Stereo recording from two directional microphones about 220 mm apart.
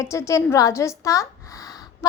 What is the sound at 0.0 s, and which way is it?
A woman's voice, 15° left (ahead or behind).